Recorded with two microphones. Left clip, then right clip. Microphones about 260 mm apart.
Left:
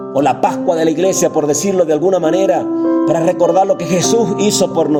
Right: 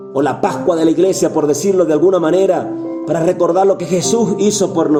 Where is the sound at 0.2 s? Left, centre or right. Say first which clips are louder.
Left 2 dB; left.